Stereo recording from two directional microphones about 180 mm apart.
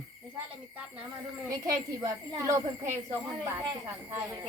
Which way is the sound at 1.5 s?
20° right (ahead or behind).